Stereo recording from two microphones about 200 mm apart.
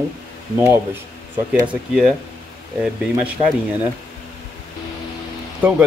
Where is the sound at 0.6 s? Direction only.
10° right (ahead or behind).